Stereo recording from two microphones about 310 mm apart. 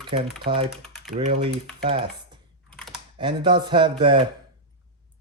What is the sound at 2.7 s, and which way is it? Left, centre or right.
Typing, centre.